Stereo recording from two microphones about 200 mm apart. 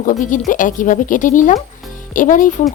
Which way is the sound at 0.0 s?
40° left (ahead or behind).